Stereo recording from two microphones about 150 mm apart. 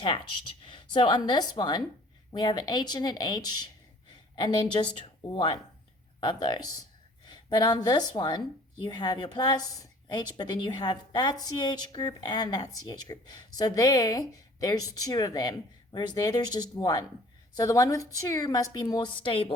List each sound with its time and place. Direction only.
0.6 s a woman's voice: 30° left (ahead or behind)
4.1 s a sound: 30° left (ahead or behind)
5.3 s a woman's voice: 30° left (ahead or behind)